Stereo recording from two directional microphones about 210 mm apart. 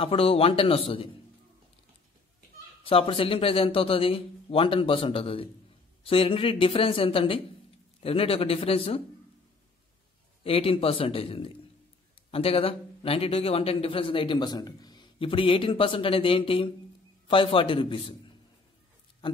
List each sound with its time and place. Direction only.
0.0 s a man's voice: 25° left (ahead or behind)
2.8 s a man's voice: 25° left (ahead or behind)
10.4 s a man's voice: 25° left (ahead or behind)